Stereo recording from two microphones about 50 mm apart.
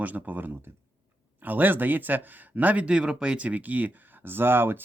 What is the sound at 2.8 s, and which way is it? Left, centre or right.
Speech, centre.